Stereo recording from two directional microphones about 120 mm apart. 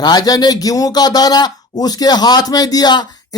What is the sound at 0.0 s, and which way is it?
Speech, 35° left (ahead or behind).